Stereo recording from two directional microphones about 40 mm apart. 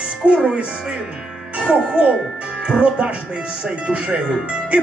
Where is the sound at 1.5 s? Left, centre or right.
Right.